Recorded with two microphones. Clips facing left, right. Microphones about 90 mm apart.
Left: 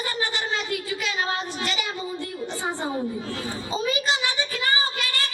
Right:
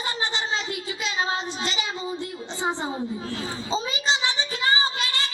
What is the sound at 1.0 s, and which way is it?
Child singing, 20° right (ahead or behind).